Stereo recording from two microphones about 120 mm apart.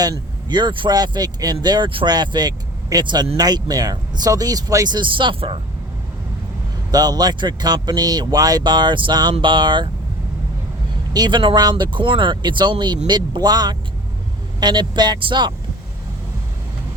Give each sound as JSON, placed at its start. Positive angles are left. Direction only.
{"t": 0.0, "sound": "speech", "side_deg": -35}
{"t": 6.9, "sound": "speech", "side_deg": -35}
{"t": 11.1, "sound": "speech", "side_deg": -35}